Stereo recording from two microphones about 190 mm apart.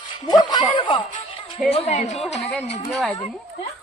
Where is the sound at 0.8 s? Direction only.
25° left (ahead or behind).